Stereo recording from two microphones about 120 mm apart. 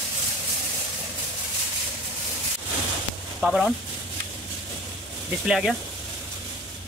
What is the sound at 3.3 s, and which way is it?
Speech, 5° right (ahead or behind).